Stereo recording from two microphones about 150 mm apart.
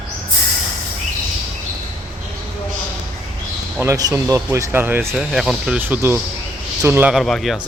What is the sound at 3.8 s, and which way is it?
A man's voice, 20° right (ahead or behind).